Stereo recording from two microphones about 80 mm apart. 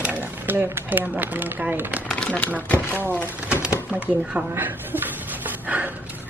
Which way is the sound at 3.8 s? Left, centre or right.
Centre.